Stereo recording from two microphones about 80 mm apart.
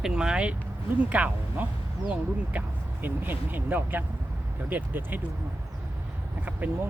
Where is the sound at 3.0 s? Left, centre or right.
Right.